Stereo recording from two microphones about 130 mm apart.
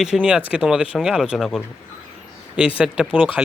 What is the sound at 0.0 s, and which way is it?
Speech, 5° right (ahead or behind).